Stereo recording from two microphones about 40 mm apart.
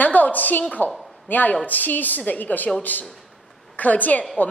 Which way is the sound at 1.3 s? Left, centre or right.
Left.